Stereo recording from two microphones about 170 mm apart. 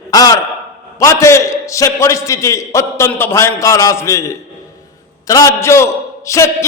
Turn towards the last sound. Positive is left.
turn(degrees=20)  # may be behind; listen again after turning